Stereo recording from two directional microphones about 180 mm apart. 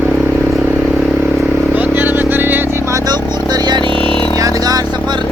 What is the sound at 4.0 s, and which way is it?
Vehicle, 5° left (ahead or behind).